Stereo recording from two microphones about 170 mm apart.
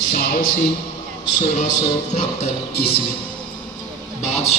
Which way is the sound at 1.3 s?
45° left (ahead or behind).